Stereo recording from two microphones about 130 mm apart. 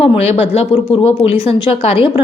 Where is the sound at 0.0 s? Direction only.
50° left (ahead or behind).